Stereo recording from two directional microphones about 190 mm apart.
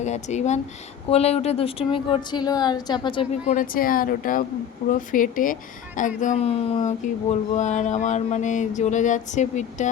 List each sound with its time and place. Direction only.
0.0 s speech: 35° left (ahead or behind)